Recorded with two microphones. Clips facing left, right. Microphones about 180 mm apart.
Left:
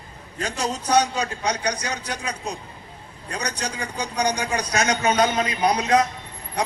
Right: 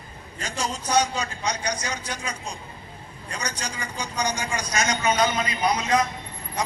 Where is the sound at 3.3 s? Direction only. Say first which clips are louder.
Left 4 dB; 65° left (ahead or behind).